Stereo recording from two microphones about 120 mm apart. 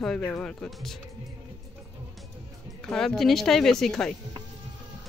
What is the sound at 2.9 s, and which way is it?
Speech, 5° left (ahead or behind).